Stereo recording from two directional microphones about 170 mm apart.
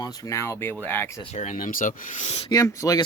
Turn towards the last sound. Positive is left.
turn(degrees=20)  # may be behind; listen again after turning